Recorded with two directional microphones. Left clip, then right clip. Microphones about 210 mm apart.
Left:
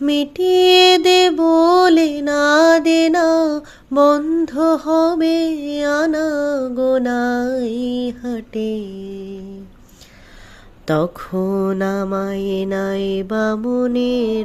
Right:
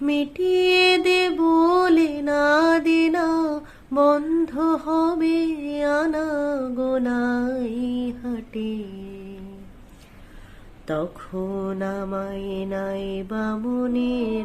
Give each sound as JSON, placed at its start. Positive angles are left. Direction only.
{"t": 0.0, "sound": "mantra", "side_deg": 35}
{"t": 10.8, "sound": "mantra", "side_deg": 45}